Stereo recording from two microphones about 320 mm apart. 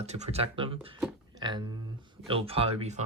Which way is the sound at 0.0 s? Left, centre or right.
Centre.